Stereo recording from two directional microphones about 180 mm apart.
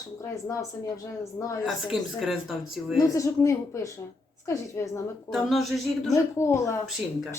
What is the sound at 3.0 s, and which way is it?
Speech, 20° left (ahead or behind).